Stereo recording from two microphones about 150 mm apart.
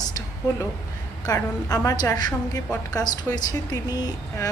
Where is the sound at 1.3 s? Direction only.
25° left (ahead or behind).